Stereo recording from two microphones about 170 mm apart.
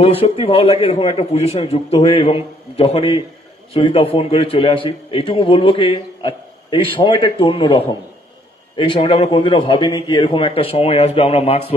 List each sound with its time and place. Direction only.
0.0 s a man's voice: 35° left (ahead or behind)